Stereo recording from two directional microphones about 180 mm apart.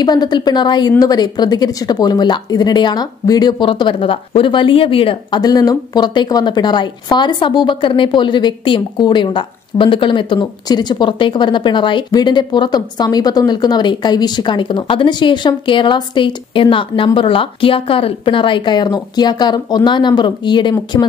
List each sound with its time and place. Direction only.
0.0 s a woman's voice: 25° left (ahead or behind)